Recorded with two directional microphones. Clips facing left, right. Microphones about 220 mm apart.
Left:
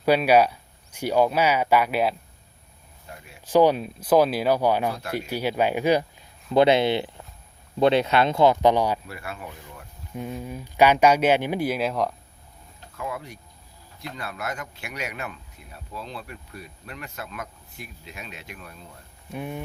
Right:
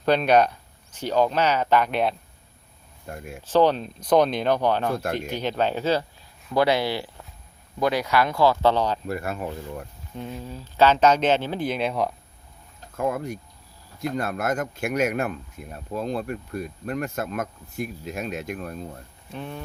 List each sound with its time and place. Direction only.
0.0 s speech: 10° left (ahead or behind)
3.1 s speech: 50° right (ahead or behind)
3.4 s speech: 10° left (ahead or behind)
9.0 s speech: 45° right (ahead or behind)
10.2 s speech: 5° left (ahead or behind)
10.4 s speech: 15° left (ahead or behind)
13.0 s speech: 50° right (ahead or behind)
19.3 s speech: 10° left (ahead or behind)